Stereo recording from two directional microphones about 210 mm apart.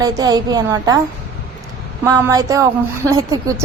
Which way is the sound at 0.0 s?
15° right (ahead or behind).